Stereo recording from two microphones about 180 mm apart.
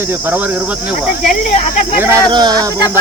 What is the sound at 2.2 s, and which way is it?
Speech, 25° right (ahead or behind).